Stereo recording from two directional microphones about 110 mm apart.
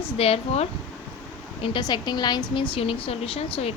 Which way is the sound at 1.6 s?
45° left (ahead or behind).